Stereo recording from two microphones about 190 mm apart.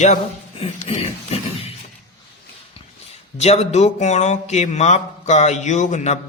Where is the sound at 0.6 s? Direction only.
30° left (ahead or behind).